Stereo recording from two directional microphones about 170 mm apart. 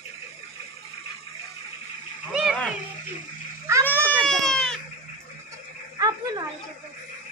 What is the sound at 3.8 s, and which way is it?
Baby cry, 10° left (ahead or behind).